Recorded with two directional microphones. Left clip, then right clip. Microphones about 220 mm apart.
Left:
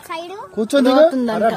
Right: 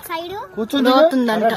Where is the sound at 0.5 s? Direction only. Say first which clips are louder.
Left 6 dB; 55° left (ahead or behind).